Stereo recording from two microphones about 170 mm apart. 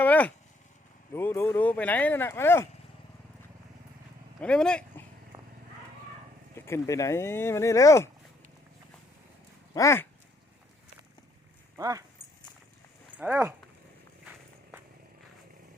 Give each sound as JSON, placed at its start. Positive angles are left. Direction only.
{"t": 0.0, "sound": "a sound", "side_deg": 10}
{"t": 1.1, "sound": "speech", "side_deg": 15}
{"t": 4.4, "sound": "speech", "side_deg": 5}
{"t": 6.7, "sound": "speech", "side_deg": 15}
{"t": 9.7, "sound": "speech", "side_deg": 15}
{"t": 11.8, "sound": "speech", "side_deg": -20}
{"t": 13.1, "sound": "speech", "side_deg": -10}